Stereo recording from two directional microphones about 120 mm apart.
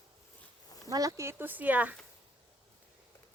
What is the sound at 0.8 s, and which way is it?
Speech, 30° right (ahead or behind).